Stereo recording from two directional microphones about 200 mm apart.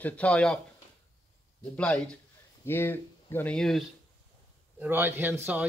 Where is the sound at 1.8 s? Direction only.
5° left (ahead or behind).